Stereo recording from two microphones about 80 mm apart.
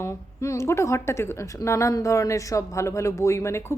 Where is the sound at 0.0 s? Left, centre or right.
Left.